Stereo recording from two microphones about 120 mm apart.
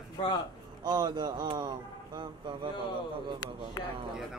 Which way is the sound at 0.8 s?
40° right (ahead or behind).